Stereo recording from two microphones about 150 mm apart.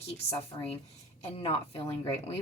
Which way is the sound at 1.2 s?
40° left (ahead or behind).